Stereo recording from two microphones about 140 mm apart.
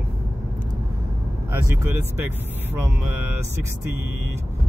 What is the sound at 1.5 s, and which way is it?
Speech, 15° right (ahead or behind).